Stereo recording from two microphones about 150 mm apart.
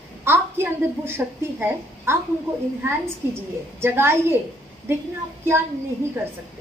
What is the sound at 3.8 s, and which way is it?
Speech, 15° right (ahead or behind).